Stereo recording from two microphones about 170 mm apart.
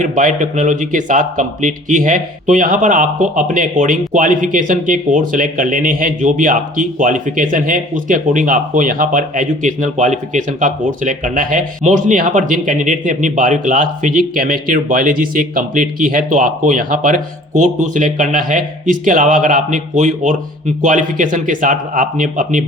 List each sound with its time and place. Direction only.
0.0 s speech: 50° right (ahead or behind)